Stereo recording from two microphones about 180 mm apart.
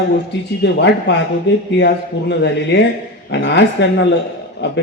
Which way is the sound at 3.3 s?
80° left.